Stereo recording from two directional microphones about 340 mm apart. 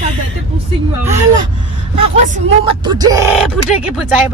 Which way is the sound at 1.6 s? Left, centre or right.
Right.